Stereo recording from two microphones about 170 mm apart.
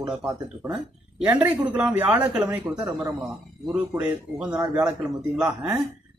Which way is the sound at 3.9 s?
10° right (ahead or behind).